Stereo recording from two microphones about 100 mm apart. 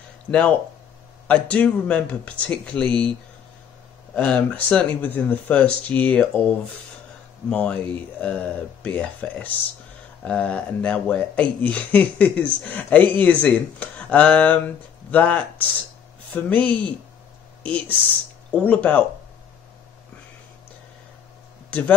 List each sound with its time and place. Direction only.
0.3 s speech: 15° left (ahead or behind)
4.1 s speech: 15° left (ahead or behind)
7.4 s speech: 10° left (ahead or behind)
21.6 s speech: 15° left (ahead or behind)